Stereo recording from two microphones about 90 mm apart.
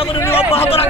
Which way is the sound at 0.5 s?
90° left.